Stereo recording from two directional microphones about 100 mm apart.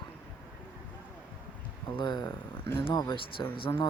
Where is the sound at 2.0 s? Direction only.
50° left (ahead or behind).